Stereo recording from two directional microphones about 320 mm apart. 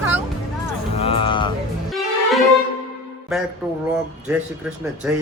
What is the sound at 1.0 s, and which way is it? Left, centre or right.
Speech, centre.